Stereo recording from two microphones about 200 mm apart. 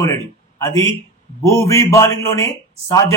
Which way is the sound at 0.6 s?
15° left (ahead or behind).